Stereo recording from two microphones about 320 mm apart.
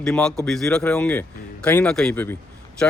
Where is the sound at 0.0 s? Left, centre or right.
Centre.